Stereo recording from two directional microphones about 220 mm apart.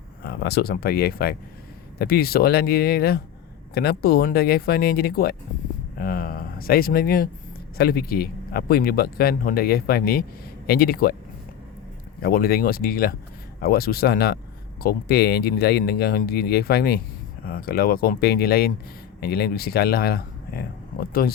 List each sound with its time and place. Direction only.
0.2 s speech: 45° left (ahead or behind)
12.2 s speech: 45° left (ahead or behind)